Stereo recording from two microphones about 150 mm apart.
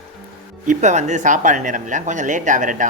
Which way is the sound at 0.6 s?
50° right (ahead or behind).